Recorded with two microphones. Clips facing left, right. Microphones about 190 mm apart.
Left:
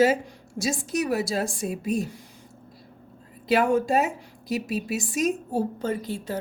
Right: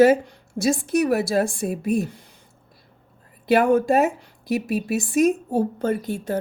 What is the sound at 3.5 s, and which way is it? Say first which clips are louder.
Speech: right 4 dB; 55° right (ahead or behind).